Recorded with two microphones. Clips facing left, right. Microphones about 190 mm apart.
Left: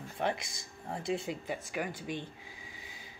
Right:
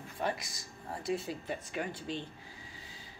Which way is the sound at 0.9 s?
20° left (ahead or behind).